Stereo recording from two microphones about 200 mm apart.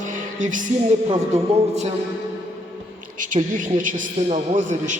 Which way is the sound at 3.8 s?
35° right (ahead or behind).